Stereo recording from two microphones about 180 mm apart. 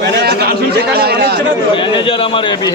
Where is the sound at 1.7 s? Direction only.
30° left (ahead or behind).